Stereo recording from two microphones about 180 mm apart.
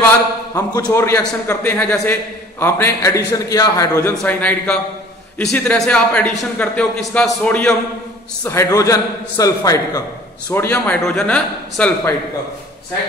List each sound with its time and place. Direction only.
0.8 s a man's voice: 15° left (ahead or behind)